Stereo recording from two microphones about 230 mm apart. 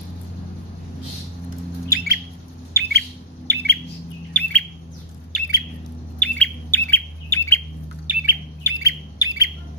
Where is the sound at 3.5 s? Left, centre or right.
Right.